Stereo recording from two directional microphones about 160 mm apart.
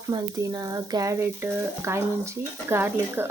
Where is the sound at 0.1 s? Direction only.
25° right (ahead or behind).